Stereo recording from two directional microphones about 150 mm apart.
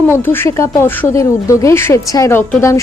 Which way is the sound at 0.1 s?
15° left (ahead or behind).